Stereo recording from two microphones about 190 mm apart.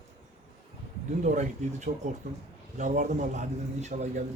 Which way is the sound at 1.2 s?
40° right (ahead or behind).